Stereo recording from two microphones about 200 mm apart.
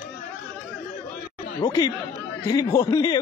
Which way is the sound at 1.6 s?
20° left (ahead or behind).